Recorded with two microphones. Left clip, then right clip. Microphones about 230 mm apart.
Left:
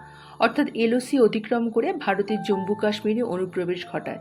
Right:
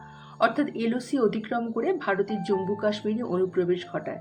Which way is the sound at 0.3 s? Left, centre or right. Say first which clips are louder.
Left 3 dB; left.